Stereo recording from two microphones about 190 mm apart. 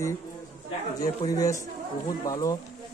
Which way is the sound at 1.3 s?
20° left (ahead or behind).